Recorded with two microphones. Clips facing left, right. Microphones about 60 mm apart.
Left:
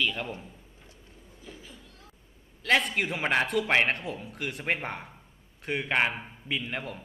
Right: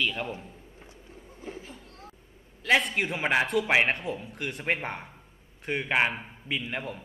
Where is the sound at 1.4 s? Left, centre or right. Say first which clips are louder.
Right 6 dB; right.